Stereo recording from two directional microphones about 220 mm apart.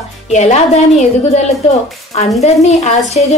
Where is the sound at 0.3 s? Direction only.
30° left (ahead or behind).